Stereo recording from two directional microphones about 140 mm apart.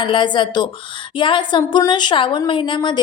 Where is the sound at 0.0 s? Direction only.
35° left (ahead or behind).